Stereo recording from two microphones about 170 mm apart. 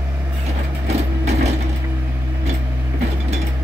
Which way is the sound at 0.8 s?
40° right (ahead or behind).